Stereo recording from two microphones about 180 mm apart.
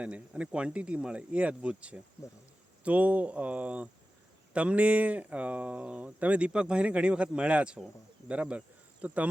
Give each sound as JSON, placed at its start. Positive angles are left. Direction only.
{"t": 0.0, "sound": "speech", "side_deg": -5}
{"t": 2.2, "sound": "speech", "side_deg": 15}
{"t": 2.8, "sound": "speech", "side_deg": -10}